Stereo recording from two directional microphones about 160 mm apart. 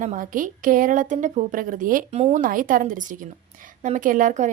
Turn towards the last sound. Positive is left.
turn(degrees=-50)  # may be behind; listen again after turning